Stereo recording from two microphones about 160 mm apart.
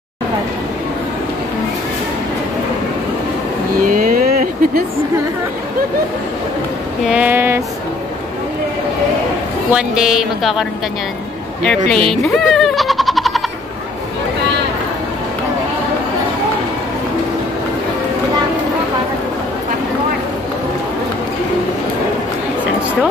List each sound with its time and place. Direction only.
3.8 s vehicle: 60° right (ahead or behind)
7.1 s a sound: 10° right (ahead or behind)
9.7 s speech: 5° right (ahead or behind)
12.1 s music: centre (ahead or behind)